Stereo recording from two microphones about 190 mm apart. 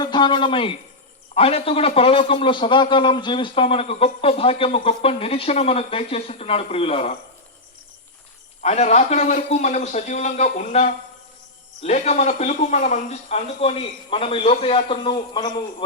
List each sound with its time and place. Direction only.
0.0 s a man's voice: 25° left (ahead or behind)
8.6 s speech: 35° left (ahead or behind)